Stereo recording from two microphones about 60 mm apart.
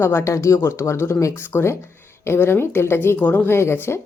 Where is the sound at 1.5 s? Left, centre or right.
Left.